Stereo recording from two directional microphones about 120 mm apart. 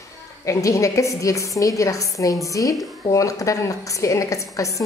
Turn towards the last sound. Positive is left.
turn(degrees=25)  # may be behind; listen again after turning